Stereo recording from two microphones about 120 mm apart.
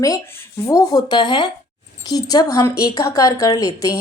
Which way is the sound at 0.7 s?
30° left (ahead or behind).